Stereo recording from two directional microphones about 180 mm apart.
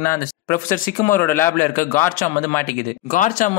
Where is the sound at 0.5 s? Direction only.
50° left (ahead or behind).